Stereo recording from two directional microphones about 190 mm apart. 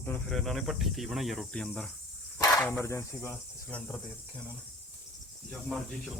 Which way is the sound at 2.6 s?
10° left (ahead or behind).